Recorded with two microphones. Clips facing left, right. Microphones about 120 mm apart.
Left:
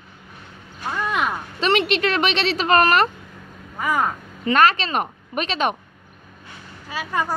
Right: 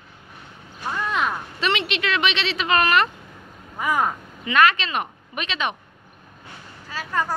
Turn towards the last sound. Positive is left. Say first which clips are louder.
# left 1 dB
turn(degrees=15)  # may be behind; listen again after turning